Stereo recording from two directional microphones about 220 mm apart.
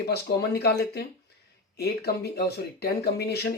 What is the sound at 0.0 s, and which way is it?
Speech, 45° left (ahead or behind).